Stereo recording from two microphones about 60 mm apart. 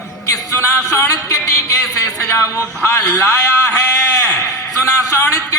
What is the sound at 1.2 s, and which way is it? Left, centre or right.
Speech, left.